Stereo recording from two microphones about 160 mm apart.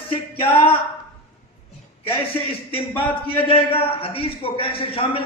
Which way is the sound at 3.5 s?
35° left (ahead or behind).